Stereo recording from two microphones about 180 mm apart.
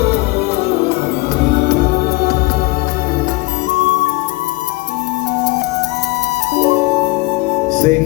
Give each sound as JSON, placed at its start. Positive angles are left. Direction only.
{"t": 7.7, "sound": "music", "side_deg": -45}